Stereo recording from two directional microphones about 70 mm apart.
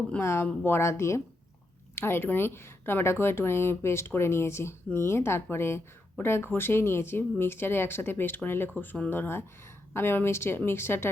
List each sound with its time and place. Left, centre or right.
0.2 s a woman's voice: left